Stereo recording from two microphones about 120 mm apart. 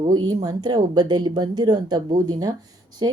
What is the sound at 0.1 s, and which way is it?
Speech, 35° right (ahead or behind).